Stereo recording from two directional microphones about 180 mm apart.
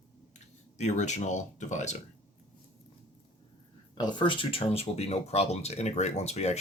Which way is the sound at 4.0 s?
25° left (ahead or behind).